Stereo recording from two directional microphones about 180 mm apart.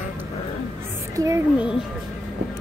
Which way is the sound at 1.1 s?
20° right (ahead or behind).